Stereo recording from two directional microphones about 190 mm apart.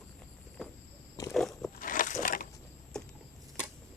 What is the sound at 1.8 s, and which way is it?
Biting, 45° left (ahead or behind).